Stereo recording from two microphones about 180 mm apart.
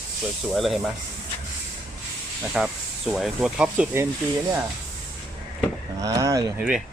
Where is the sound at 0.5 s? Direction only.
Centre (ahead or behind).